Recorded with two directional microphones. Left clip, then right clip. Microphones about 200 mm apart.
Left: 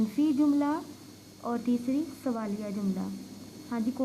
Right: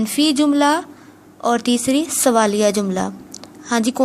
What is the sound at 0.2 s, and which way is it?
A woman's voice, 35° right (ahead or behind).